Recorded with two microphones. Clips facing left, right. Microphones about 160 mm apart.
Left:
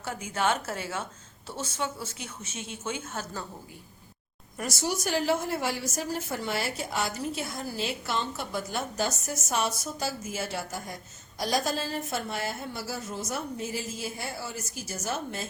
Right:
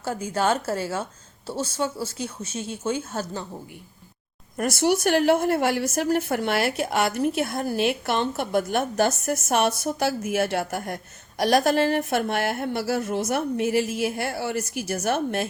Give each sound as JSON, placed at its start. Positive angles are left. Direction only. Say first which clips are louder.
{"t": 0.0, "sound": "a woman's voice", "louder": "right 5 dB", "side_deg": -35}
{"t": 4.5, "sound": "a woman's voice", "louder": "right 9 dB", "side_deg": -60}